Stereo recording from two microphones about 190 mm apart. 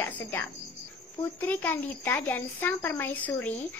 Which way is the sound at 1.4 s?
10° left (ahead or behind).